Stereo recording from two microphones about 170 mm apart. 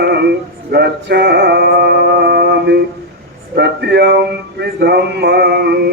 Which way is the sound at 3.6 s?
80° right.